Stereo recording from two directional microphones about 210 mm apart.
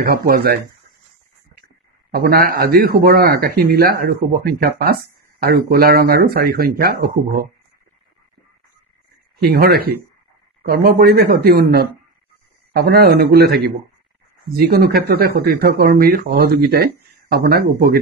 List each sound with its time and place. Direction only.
0.0 s speech: 45° right (ahead or behind)
2.1 s speech: 45° right (ahead or behind)
9.4 s speech: 45° right (ahead or behind)